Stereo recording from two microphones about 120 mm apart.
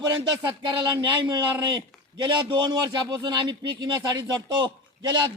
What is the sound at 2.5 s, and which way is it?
A man's voice, 35° right (ahead or behind).